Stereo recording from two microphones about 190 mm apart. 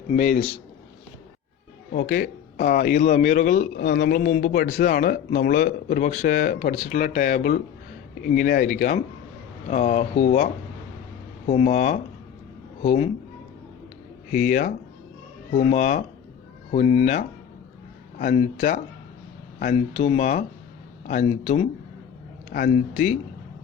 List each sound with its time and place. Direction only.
0.1 s speech: 40° left (ahead or behind)
1.9 s speech: 50° left (ahead or behind)
14.3 s speech: 45° left (ahead or behind)